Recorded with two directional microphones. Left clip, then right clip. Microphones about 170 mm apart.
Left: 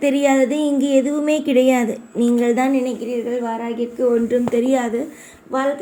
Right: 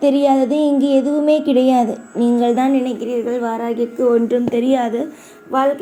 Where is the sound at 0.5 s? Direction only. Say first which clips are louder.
Right 2 dB; 20° left (ahead or behind).